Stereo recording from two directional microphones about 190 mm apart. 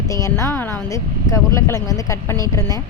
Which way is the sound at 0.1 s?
15° left (ahead or behind).